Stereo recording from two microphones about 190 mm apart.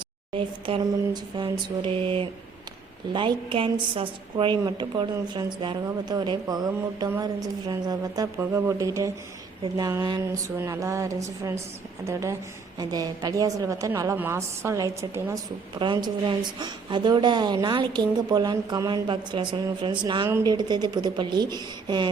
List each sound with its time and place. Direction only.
0.3 s a woman's voice: 25° right (ahead or behind)